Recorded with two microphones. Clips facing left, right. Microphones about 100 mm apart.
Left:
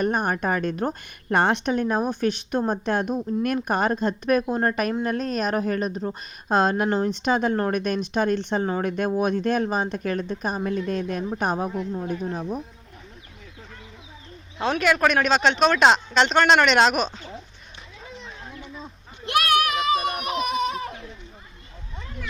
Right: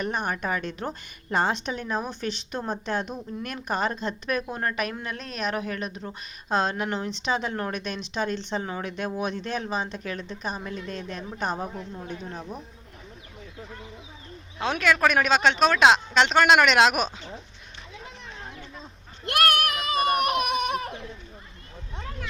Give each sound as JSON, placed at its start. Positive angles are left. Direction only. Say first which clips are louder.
{"t": 0.0, "sound": "a woman's voice", "louder": "left 5 dB", "side_deg": 45}
{"t": 14.6, "sound": "speech", "louder": "left 2 dB", "side_deg": 0}
{"t": 19.2, "sound": "a sound", "louder": "left 2 dB", "side_deg": -55}